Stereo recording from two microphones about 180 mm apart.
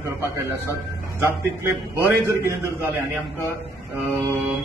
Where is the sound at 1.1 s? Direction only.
15° right (ahead or behind).